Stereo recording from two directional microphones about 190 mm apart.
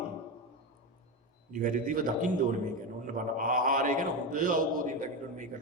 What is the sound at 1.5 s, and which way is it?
A man's voice, 45° right (ahead or behind).